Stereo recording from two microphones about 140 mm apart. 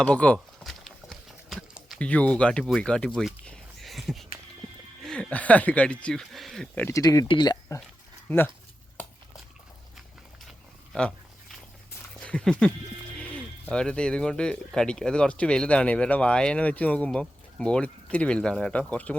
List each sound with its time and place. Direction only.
0.0 s speech: 10° left (ahead or behind)
0.3 s a sound: centre (ahead or behind)
2.0 s speech: 10° left (ahead or behind)
6.8 s speech: 25° left (ahead or behind)
8.3 s speech: 10° left (ahead or behind)
10.9 s speech: 10° left (ahead or behind)
12.2 s speech: 5° left (ahead or behind)